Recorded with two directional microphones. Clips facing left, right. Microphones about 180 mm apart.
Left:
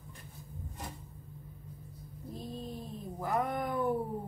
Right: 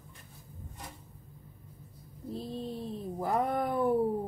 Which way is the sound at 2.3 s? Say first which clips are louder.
Right 4 dB; 30° right (ahead or behind).